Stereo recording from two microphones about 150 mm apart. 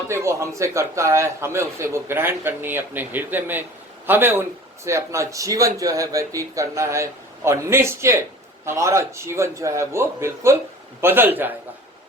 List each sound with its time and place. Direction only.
0.1 s a man's voice: 20° right (ahead or behind)